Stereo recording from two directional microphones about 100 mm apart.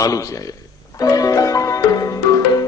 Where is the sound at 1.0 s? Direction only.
35° left (ahead or behind).